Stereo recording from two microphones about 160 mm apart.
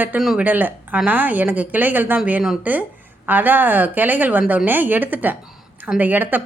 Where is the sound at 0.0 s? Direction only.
5° right (ahead or behind).